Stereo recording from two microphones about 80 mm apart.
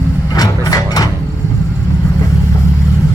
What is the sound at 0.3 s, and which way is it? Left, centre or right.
Engine, left.